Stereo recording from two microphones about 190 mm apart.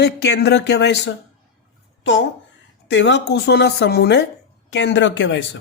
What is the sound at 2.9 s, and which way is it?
Speech, 70° left (ahead or behind).